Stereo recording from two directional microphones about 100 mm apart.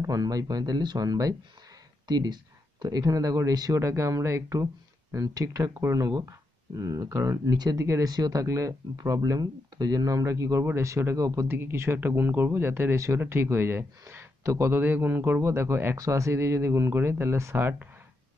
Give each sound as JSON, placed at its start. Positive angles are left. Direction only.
{"t": 0.0, "sound": "speech", "side_deg": -40}
{"t": 11.4, "sound": "speech", "side_deg": -20}